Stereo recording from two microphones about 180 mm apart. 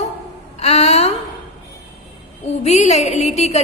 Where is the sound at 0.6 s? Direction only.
35° left (ahead or behind).